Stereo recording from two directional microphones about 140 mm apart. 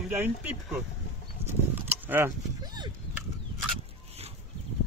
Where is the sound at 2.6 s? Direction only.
30° right (ahead or behind).